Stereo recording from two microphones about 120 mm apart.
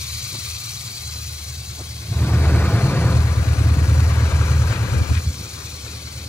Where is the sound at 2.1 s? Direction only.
15° left (ahead or behind).